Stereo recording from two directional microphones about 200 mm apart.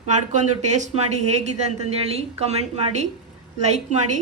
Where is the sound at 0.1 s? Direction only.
35° right (ahead or behind).